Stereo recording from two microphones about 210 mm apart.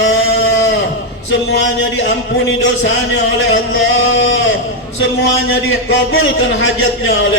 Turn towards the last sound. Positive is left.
turn(degrees=70)  # may be behind; listen again after turning